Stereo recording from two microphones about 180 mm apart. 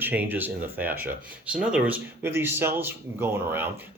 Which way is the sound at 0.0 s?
10° right (ahead or behind).